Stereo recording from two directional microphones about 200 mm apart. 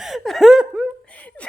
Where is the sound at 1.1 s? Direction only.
5° left (ahead or behind).